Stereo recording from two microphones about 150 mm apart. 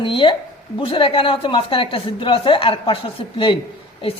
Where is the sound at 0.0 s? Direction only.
35° left (ahead or behind).